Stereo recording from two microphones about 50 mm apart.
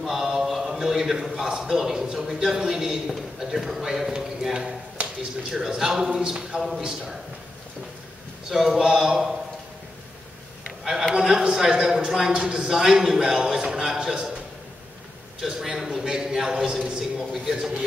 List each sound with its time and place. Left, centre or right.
0.0 s a sound: centre
1.5 s speech: centre
8.5 s speech: centre
10.8 s a sound: centre
11.1 s a man's voice: centre
15.4 s speech: centre